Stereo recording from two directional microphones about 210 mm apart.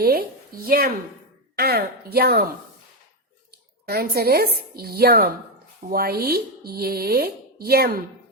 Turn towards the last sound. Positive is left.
turn(degrees=-50)  # may be behind; listen again after turning